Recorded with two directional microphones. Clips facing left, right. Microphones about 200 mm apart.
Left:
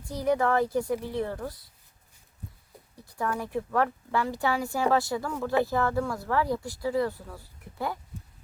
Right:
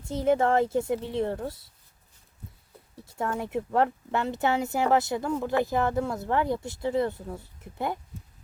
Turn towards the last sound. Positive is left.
turn(degrees=-20)  # may be behind; listen again after turning